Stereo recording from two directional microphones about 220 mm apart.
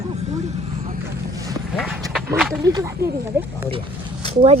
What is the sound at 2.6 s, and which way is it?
Speech, 15° right (ahead or behind).